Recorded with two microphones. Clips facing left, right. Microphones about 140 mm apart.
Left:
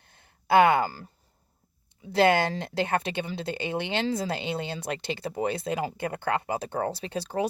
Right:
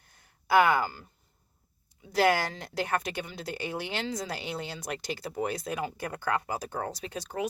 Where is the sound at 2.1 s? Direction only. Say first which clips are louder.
Left 3 dB; 25° left (ahead or behind).